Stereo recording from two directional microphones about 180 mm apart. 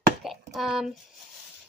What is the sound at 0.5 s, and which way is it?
Speech, centre (ahead or behind).